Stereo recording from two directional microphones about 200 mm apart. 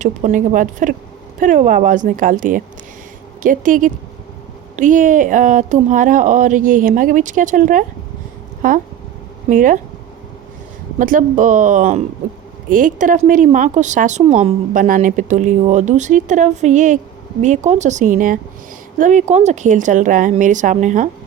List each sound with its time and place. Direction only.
0.0 s speech: 35° right (ahead or behind)
9.5 s speech: 40° right (ahead or behind)
10.9 s speech: 40° right (ahead or behind)